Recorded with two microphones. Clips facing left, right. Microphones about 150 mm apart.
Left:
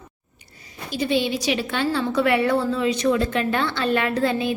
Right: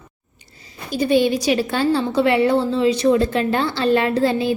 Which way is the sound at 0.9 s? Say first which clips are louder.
Right 6 dB; 45° right (ahead or behind).